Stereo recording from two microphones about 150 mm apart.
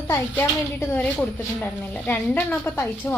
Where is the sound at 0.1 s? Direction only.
15° left (ahead or behind).